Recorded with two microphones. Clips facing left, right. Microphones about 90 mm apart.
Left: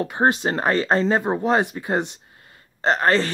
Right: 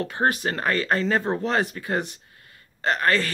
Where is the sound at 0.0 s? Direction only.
20° left (ahead or behind).